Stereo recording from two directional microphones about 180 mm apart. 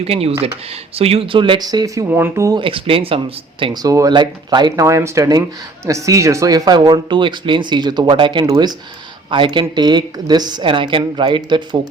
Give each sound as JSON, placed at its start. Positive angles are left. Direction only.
{"t": 0.0, "sound": "speech", "side_deg": -35}
{"t": 2.6, "sound": "speech", "side_deg": -30}